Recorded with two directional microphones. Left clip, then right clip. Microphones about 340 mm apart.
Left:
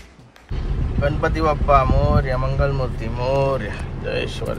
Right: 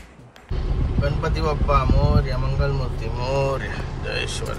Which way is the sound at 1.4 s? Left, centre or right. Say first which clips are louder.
Left 6 dB; centre.